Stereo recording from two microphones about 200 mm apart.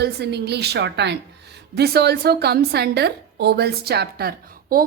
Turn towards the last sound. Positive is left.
turn(degrees=-45)  # may be behind; listen again after turning